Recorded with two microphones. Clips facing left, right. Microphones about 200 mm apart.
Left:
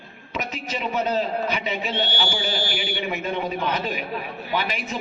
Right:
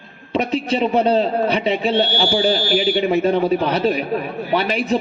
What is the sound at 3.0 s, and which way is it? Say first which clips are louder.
A man's voice: right 10 dB; 35° right (ahead or behind).